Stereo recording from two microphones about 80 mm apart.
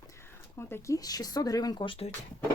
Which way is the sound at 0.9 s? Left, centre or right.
Left.